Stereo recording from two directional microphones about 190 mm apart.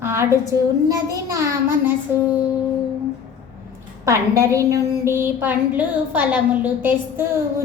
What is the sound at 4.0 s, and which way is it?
A woman's voice, 15° right (ahead or behind).